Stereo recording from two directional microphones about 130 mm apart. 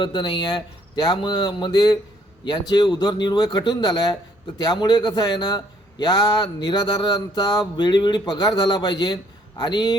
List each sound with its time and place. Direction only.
0.0 s speech: 40° left (ahead or behind)